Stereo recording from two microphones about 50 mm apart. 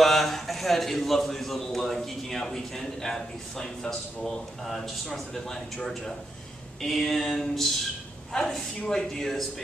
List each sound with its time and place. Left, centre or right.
0.0 s a man's voice: centre
4.6 s a man's voice: centre